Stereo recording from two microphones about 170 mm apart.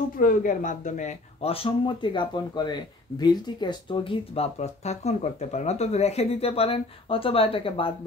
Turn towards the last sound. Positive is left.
turn(degrees=30)  # may be behind; listen again after turning